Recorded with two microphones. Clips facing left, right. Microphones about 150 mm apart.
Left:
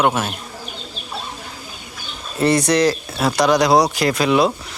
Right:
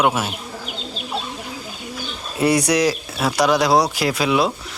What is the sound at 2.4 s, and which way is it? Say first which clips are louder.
Speech: left 1 dB; 10° right (ahead or behind).